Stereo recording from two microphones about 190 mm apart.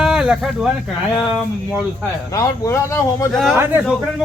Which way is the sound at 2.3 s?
15° left (ahead or behind).